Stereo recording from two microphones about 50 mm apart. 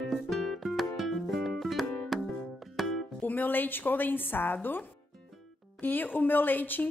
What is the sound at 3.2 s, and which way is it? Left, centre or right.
A woman's voice, left.